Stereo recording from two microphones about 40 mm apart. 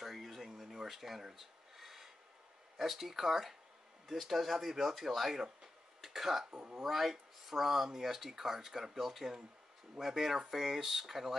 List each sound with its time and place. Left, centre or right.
0.0 s a sound: centre
0.5 s filing: centre
2.8 s speech: centre
5.4 s a sound: centre
6.5 s speech: right
6.8 s speech: centre